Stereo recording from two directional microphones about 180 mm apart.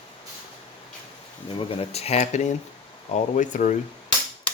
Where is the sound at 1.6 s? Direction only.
30° left (ahead or behind).